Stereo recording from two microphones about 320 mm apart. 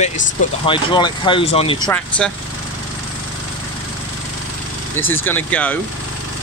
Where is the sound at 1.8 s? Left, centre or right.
Centre.